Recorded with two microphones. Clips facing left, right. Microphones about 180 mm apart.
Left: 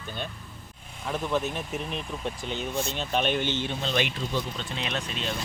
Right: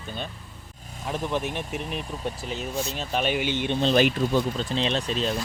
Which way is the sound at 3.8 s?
40° right (ahead or behind).